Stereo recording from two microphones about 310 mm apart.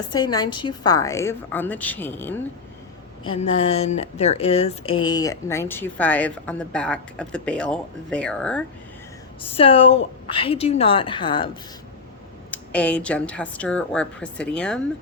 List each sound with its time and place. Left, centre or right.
0.1 s speech: centre
3.2 s speech: centre
9.4 s speech: centre
12.5 s a woman's voice: centre